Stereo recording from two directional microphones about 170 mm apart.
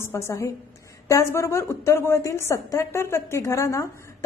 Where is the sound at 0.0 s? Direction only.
15° left (ahead or behind).